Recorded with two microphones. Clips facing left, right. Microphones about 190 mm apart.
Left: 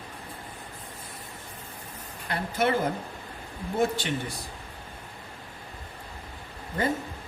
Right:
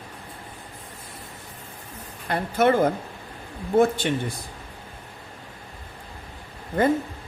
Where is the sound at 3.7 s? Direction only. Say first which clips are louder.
Right 7 dB; 55° right (ahead or behind).